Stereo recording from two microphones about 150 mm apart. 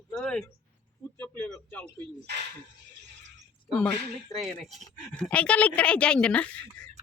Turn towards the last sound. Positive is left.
turn(degrees=5)  # may be behind; listen again after turning